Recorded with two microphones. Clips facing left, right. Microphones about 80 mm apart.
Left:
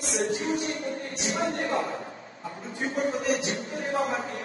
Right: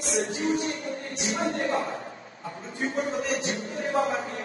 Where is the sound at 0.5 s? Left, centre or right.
Right.